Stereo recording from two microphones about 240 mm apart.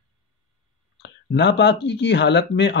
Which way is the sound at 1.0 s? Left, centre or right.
Left.